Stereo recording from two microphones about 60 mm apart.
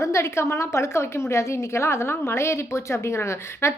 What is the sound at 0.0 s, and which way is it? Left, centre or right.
A woman's voice, left.